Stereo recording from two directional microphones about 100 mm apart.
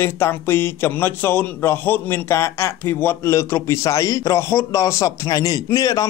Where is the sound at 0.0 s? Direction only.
25° left (ahead or behind).